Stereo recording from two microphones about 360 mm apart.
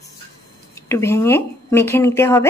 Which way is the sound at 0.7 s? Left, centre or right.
Centre.